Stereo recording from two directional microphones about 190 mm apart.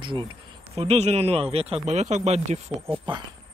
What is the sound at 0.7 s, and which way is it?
Speech, 35° right (ahead or behind).